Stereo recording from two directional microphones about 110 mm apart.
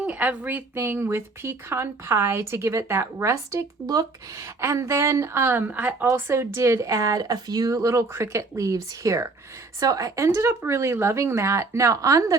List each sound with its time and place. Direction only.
0.0 s speech: 10° right (ahead or behind); by 12.4 s 30° right (ahead or behind)